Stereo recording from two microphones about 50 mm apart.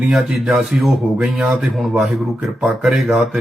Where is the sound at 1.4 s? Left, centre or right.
Right.